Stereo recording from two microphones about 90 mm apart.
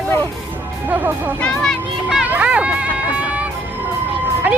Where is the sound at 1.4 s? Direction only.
10° left (ahead or behind).